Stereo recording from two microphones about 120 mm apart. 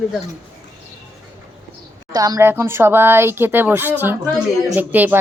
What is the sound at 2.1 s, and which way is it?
Speech, 30° right (ahead or behind).